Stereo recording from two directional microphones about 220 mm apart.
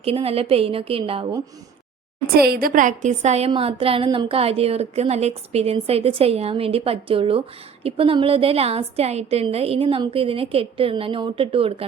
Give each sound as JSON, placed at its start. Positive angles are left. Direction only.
{"t": 0.0, "sound": "a woman's voice", "side_deg": -25}
{"t": 2.5, "sound": "a woman's voice", "side_deg": -40}